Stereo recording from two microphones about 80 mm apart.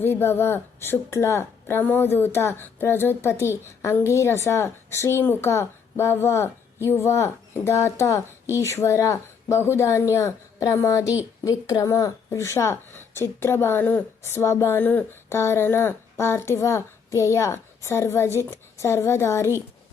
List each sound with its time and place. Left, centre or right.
0.0 s speech: left